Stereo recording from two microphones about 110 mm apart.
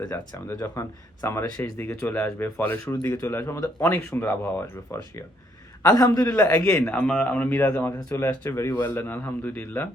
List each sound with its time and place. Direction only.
0.1 s speech: 25° left (ahead or behind)
5.8 s a man's voice: 35° left (ahead or behind); by 9.9 s 20° left (ahead or behind)